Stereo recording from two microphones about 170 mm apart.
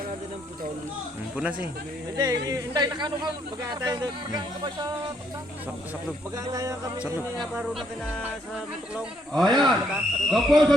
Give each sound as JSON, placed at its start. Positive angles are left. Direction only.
{"t": 2.1, "sound": "speech", "side_deg": -25}
{"t": 6.3, "sound": "speech", "side_deg": -20}
{"t": 7.3, "sound": "a man's voice", "side_deg": 0}